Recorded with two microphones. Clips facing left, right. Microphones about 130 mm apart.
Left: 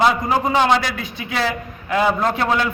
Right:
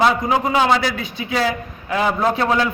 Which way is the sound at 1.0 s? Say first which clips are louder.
Right 2 dB; 25° right (ahead or behind).